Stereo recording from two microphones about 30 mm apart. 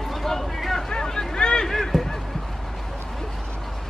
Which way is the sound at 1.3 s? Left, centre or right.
Left.